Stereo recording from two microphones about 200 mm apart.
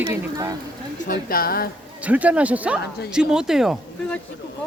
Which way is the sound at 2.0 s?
5° right (ahead or behind).